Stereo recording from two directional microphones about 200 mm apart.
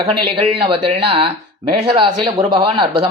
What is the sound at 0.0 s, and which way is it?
A woman's voice, 25° right (ahead or behind).